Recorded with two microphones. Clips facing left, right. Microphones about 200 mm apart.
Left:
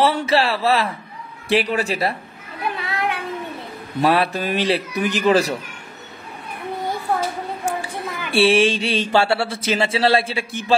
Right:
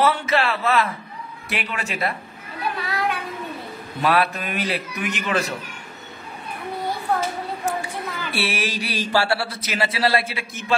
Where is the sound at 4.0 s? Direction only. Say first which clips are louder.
Left 3 dB; 30° left (ahead or behind).